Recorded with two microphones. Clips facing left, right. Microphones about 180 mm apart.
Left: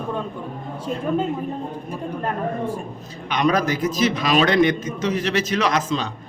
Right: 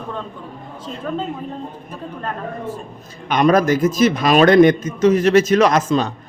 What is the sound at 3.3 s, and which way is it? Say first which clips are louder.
A man's voice: right 6 dB; 50° right (ahead or behind).